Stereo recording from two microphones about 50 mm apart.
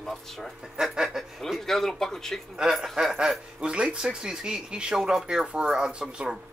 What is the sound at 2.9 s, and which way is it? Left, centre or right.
Speech, centre.